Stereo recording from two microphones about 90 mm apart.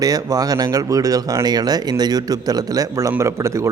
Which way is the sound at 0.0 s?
40° right (ahead or behind).